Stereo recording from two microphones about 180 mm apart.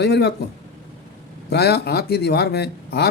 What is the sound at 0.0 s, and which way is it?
Speech, 65° left (ahead or behind).